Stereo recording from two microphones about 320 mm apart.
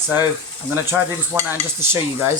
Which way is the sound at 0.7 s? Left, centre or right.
Centre.